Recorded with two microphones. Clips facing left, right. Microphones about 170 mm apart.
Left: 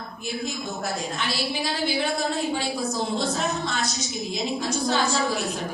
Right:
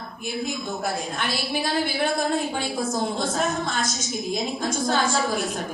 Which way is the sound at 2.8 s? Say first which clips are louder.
Right 1 dB; 50° right (ahead or behind).